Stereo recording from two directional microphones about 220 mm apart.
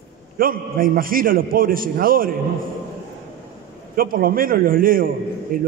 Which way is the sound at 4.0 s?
40° right (ahead or behind).